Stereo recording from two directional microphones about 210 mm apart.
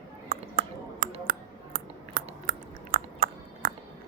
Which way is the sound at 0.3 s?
40° right (ahead or behind).